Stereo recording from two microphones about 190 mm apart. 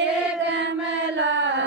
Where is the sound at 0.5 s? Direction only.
70° right (ahead or behind).